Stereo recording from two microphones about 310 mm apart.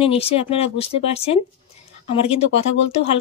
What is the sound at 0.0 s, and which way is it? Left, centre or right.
Speech, centre.